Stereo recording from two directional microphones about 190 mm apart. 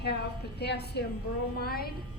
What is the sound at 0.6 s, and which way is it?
A woman's voice, 60° left (ahead or behind).